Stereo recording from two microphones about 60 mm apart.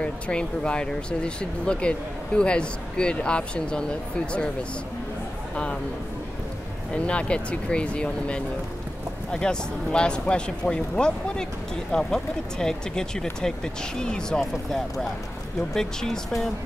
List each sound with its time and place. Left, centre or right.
0.0 s speech: centre
6.9 s speech: centre